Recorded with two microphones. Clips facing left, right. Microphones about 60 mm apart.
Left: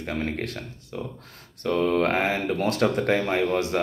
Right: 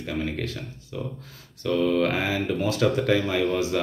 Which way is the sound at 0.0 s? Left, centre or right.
Left.